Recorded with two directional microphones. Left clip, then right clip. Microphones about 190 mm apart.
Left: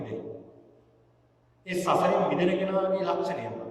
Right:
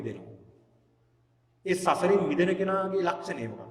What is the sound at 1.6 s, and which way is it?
A man's voice, 45° right (ahead or behind).